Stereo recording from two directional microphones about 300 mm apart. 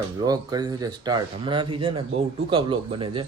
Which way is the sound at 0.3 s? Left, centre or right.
Centre.